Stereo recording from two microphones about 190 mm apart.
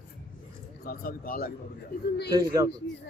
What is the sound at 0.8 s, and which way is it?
Speech, 50° left (ahead or behind).